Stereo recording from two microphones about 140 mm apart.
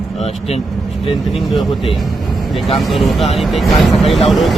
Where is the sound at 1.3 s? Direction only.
Centre (ahead or behind).